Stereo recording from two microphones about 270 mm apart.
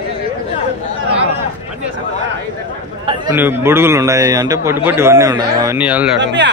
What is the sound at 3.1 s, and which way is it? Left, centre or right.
A man's voice, centre.